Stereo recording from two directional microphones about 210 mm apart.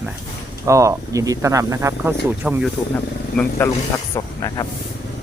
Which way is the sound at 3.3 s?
10° left (ahead or behind).